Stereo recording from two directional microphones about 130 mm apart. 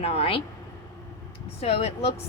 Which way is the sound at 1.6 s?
50° left (ahead or behind).